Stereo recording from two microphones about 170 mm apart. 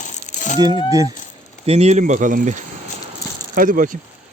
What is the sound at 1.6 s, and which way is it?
Speech, 40° right (ahead or behind).